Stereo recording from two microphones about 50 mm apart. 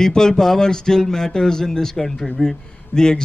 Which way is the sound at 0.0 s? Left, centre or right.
Centre.